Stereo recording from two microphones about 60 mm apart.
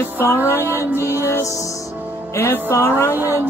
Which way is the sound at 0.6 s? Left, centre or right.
Right.